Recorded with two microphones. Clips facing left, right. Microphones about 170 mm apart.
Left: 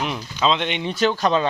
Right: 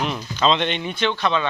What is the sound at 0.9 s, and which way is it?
Speech, 40° left (ahead or behind).